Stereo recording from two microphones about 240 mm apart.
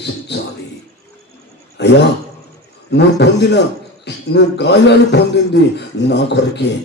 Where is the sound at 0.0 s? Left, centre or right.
Left.